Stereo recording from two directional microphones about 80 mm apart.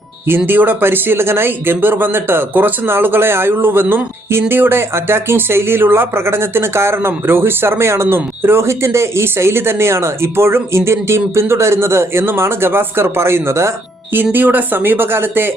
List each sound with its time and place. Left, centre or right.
0.3 s speech: right